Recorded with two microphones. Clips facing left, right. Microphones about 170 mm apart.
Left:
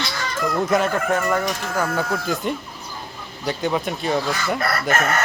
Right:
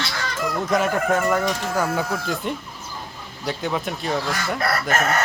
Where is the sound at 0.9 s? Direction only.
15° right (ahead or behind).